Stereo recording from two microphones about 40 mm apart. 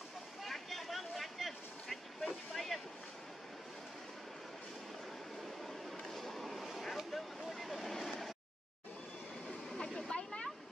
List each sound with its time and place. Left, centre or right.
0.4 s vehicle: centre
5.9 s vehicle: centre
9.8 s waterfall: left